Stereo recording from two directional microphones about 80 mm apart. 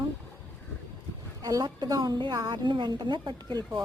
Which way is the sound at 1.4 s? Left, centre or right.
Right.